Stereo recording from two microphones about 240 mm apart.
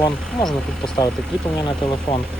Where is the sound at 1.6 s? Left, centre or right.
Centre.